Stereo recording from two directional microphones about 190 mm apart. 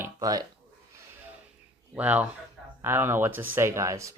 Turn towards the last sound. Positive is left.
turn(degrees=-15)  # may be behind; listen again after turning